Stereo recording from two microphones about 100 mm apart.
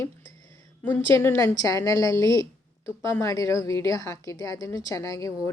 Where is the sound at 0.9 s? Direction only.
25° left (ahead or behind).